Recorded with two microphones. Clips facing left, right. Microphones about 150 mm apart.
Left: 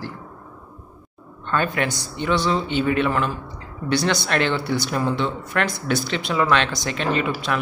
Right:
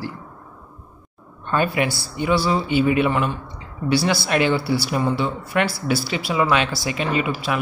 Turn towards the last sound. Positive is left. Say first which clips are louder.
# even
turn(degrees=-5)  # may be behind; listen again after turning